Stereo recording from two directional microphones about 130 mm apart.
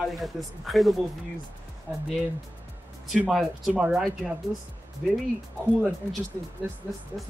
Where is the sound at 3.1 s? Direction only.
Centre (ahead or behind).